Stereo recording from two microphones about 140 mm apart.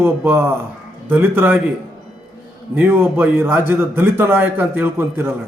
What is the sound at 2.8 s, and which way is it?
A man's voice, 15° right (ahead or behind).